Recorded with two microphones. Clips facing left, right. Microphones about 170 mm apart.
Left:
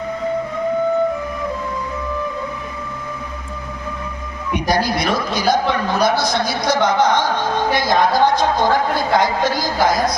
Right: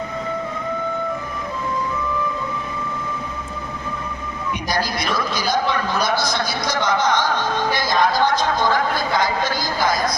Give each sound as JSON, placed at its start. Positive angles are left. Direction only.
{"t": 4.7, "sound": "a man's voice", "side_deg": 60}
{"t": 9.1, "sound": "a woman's voice", "side_deg": 70}